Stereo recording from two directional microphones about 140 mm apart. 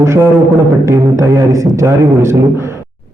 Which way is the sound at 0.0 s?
20° right (ahead or behind).